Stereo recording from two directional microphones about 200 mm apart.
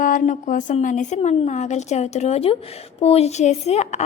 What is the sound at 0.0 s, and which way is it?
A woman's voice, 40° left (ahead or behind).